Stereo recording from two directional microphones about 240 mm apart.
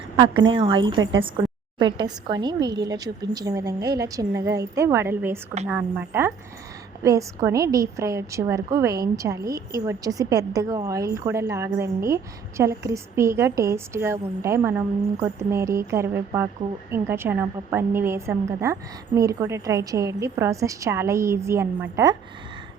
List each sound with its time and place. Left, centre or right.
0.4 s a woman's voice: right